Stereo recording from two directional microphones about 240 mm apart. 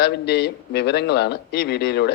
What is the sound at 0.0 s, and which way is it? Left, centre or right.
A man's voice, left.